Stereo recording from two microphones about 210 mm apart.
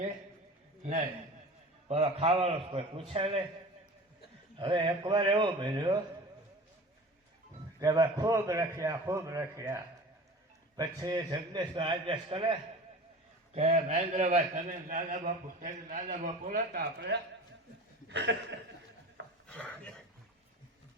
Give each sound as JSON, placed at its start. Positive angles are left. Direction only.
{"t": 0.8, "sound": "a man's voice", "side_deg": -30}
{"t": 4.5, "sound": "a man's voice", "side_deg": -20}
{"t": 7.8, "sound": "a man's voice", "side_deg": -15}
{"t": 18.3, "sound": "speech", "side_deg": -55}
{"t": 19.5, "sound": "a sound", "side_deg": 5}